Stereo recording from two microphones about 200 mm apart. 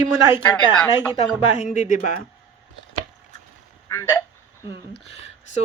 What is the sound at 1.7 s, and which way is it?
Speech, 40° left (ahead or behind).